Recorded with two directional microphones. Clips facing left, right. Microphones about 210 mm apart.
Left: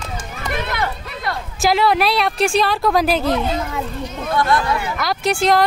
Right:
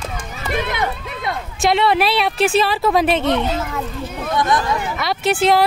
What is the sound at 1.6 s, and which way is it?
Speech, centre (ahead or behind).